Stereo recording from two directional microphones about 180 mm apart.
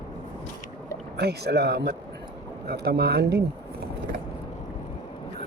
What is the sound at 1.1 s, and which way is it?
Speech, 65° right (ahead or behind).